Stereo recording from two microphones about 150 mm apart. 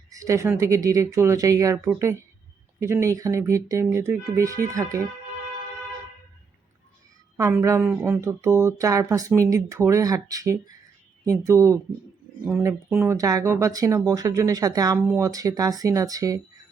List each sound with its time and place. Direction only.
0.1 s speech: 20° right (ahead or behind)
7.3 s speech: 20° right (ahead or behind)